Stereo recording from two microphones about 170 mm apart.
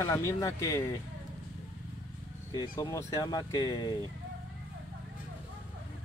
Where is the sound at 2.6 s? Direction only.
20° left (ahead or behind).